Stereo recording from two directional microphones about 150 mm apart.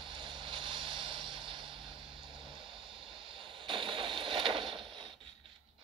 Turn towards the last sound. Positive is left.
turn(degrees=-35)  # may be behind; listen again after turning